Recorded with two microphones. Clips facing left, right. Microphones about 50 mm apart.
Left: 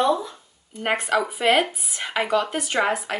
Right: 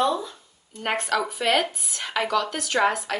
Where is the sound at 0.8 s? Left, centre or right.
Centre.